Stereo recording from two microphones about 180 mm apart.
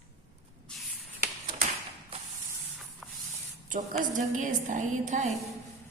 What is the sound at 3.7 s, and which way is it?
A woman's voice, 45° right (ahead or behind).